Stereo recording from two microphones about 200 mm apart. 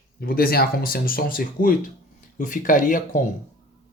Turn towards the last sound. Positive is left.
turn(degrees=40)  # may be behind; listen again after turning